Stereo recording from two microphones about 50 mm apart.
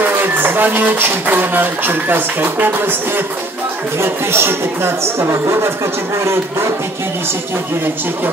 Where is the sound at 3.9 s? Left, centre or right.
Right.